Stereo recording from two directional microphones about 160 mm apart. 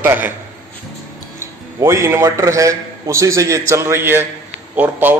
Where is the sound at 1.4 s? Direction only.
15° right (ahead or behind).